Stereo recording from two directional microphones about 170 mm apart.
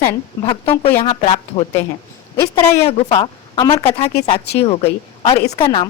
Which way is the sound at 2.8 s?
30° left (ahead or behind).